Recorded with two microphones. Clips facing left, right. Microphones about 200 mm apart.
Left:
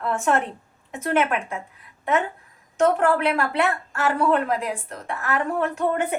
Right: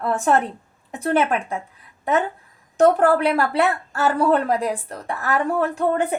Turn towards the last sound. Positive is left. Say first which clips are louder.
# right 2 dB
turn(degrees=-30)  # may be behind; listen again after turning